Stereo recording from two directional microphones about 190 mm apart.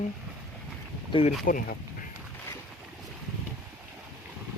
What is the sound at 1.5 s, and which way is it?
Speech, 45° left (ahead or behind).